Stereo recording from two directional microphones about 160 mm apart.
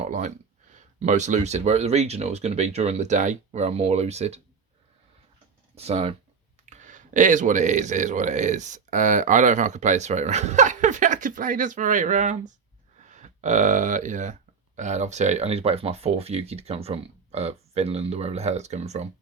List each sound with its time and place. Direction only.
0.0 s speech: 50° right (ahead or behind)
5.7 s speech: 40° right (ahead or behind)
6.7 s speech: 50° right (ahead or behind)